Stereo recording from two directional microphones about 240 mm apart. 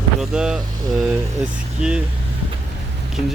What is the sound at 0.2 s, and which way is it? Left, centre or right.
Speech, centre.